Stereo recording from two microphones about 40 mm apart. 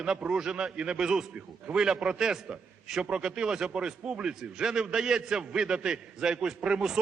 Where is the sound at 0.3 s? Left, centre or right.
Centre.